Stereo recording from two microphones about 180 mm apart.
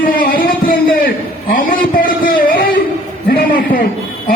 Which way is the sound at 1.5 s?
50° left (ahead or behind).